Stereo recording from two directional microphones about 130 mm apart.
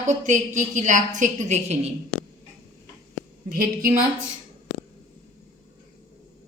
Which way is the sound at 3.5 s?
90° right.